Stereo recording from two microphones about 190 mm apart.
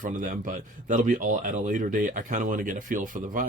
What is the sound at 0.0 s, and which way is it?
Speech, 45° right (ahead or behind).